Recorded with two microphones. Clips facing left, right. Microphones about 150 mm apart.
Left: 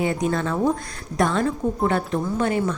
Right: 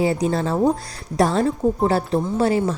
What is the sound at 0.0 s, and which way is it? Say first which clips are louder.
A woman's voice: right 3 dB; 30° right (ahead or behind).